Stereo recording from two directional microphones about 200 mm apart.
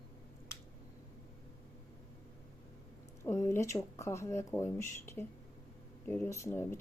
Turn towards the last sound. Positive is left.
turn(degrees=10)  # may be behind; listen again after turning